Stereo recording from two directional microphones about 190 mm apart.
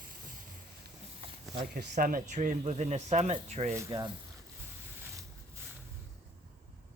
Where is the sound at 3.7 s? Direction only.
15° right (ahead or behind).